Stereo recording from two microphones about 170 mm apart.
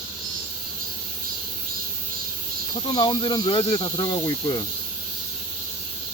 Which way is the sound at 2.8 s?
25° left (ahead or behind).